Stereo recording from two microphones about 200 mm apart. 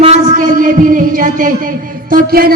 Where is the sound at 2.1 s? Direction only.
45° right (ahead or behind).